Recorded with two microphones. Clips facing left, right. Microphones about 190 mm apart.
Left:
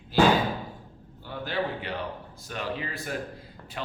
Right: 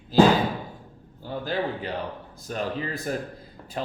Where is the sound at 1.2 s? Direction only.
40° right (ahead or behind).